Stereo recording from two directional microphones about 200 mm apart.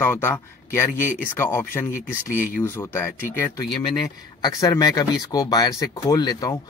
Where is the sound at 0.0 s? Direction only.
10° left (ahead or behind).